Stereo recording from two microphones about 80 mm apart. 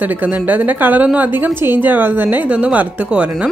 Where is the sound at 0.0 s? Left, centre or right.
Right.